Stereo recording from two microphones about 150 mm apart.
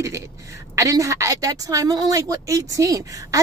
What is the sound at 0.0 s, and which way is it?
A woman's voice, 20° right (ahead or behind).